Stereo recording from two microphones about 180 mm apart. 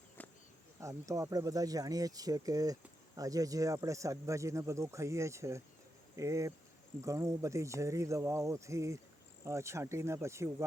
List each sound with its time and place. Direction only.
0.2 s insect: 10° left (ahead or behind)
0.8 s speech: 15° right (ahead or behind)